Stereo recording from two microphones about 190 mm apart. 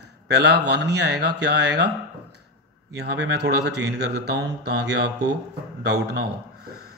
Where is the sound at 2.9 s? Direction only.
60° right (ahead or behind).